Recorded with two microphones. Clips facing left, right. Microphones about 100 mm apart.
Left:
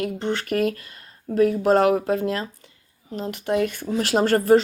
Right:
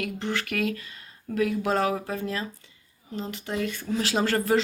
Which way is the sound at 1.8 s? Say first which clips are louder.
Left 8 dB; 65° left (ahead or behind).